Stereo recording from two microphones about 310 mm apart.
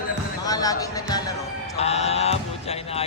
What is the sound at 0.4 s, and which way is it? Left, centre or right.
Music, centre.